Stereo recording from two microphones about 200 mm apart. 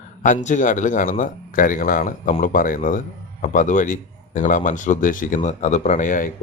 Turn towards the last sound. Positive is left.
turn(degrees=40)  # may be behind; listen again after turning